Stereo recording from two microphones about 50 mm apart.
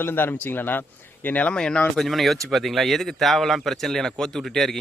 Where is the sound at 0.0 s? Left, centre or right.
Left.